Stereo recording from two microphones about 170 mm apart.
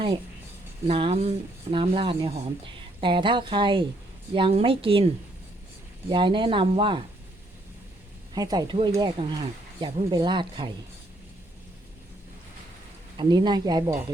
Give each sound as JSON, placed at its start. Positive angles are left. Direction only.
{"t": 0.9, "sound": "a woman's voice", "side_deg": -35}
{"t": 6.1, "sound": "speech", "side_deg": -30}
{"t": 8.4, "sound": "speech", "side_deg": -25}
{"t": 13.1, "sound": "speech", "side_deg": -25}